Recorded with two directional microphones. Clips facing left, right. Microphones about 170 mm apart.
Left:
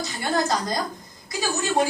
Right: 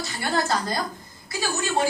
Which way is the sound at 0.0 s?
20° left (ahead or behind).